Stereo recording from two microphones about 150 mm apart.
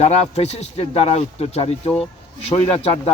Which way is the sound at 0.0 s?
50° left (ahead or behind).